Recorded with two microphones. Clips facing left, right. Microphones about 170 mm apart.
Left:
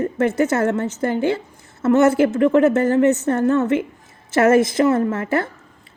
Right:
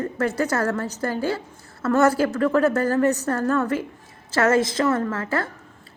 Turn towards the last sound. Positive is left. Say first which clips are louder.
# left 5 dB
turn(degrees=25)  # may be behind; listen again after turning